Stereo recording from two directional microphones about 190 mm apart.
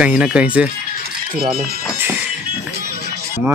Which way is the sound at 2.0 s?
10° right (ahead or behind).